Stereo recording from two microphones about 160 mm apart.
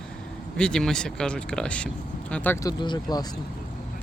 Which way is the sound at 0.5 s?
5° left (ahead or behind).